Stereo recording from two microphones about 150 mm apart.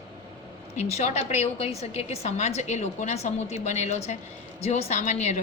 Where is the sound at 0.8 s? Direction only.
50° left (ahead or behind).